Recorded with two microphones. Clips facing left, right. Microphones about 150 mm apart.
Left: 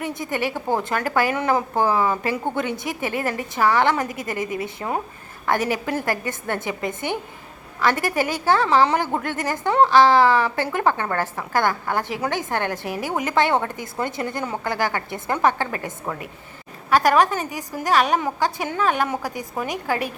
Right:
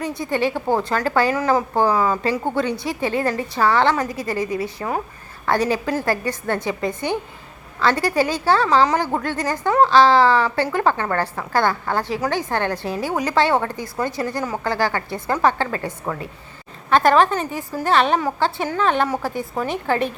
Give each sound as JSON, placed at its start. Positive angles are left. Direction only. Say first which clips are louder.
{"t": 0.0, "sound": "a woman's voice", "louder": "right 4 dB", "side_deg": 20}
{"t": 16.9, "sound": "a woman's voice", "louder": "right 2 dB", "side_deg": 10}